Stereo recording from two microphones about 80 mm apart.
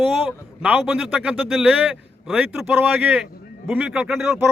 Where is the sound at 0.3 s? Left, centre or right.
Centre.